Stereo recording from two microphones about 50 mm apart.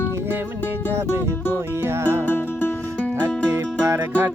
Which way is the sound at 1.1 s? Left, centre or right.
Left.